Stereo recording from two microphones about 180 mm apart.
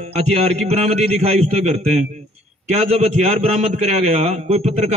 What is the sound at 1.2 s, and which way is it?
A man's voice, 35° right (ahead or behind).